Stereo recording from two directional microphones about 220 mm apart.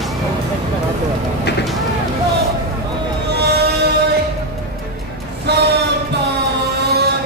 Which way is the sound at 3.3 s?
50° right (ahead or behind).